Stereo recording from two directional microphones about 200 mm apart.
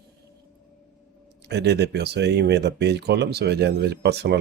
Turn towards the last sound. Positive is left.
turn(degrees=-55)  # may be behind; listen again after turning